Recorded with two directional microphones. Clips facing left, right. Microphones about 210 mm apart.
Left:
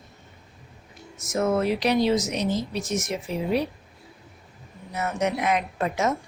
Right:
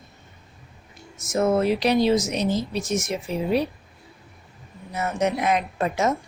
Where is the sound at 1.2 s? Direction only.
25° right (ahead or behind).